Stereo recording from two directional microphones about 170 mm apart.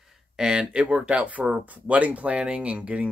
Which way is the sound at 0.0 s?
5° right (ahead or behind).